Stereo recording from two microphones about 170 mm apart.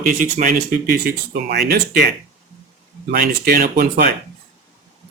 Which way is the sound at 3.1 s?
65° right (ahead or behind).